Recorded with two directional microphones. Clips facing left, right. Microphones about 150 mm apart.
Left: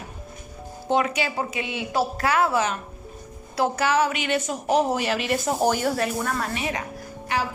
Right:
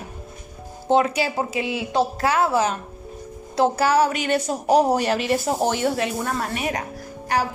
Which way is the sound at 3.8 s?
35° right (ahead or behind).